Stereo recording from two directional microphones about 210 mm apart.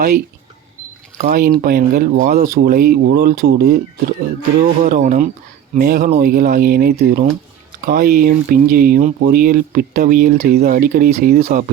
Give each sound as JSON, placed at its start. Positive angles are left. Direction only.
{"t": 1.2, "sound": "speech", "side_deg": -45}
{"t": 4.8, "sound": "speech", "side_deg": -40}